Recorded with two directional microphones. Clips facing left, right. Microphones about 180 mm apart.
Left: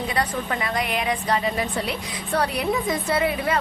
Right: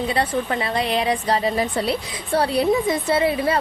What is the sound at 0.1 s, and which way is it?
A woman's voice, 30° right (ahead or behind).